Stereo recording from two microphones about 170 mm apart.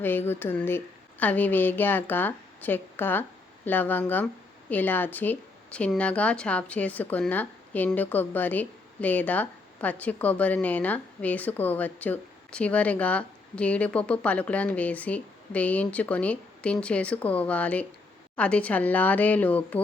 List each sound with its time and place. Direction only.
0.0 s a woman's voice: 10° left (ahead or behind)